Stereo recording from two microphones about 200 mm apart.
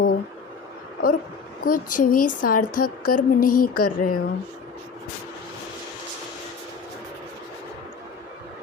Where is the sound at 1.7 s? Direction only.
45° left (ahead or behind).